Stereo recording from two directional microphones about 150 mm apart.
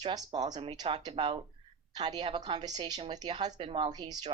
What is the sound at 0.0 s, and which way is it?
A woman's voice, 30° right (ahead or behind).